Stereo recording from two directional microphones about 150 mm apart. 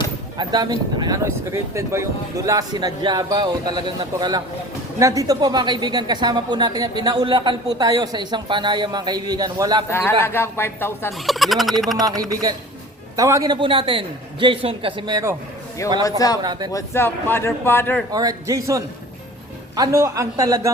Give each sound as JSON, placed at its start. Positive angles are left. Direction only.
{"t": 0.3, "sound": "a woman's voice", "side_deg": -25}
{"t": 9.9, "sound": "speech", "side_deg": 15}
{"t": 11.3, "sound": "turkey", "side_deg": 0}
{"t": 11.9, "sound": "a woman's voice", "side_deg": -25}
{"t": 16.0, "sound": "speech", "side_deg": 25}
{"t": 16.4, "sound": "a woman's voice", "side_deg": -25}
{"t": 16.7, "sound": "speech", "side_deg": 15}
{"t": 18.1, "sound": "a woman's voice", "side_deg": -25}